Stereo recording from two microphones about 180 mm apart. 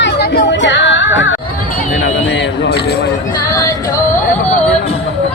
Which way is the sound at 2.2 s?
80° left.